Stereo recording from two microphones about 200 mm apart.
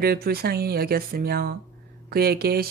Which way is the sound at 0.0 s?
50° right (ahead or behind).